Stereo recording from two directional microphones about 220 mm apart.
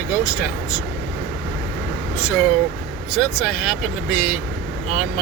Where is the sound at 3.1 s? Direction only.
5° right (ahead or behind).